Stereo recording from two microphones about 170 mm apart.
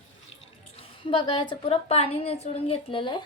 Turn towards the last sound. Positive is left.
turn(degrees=30)  # may be behind; listen again after turning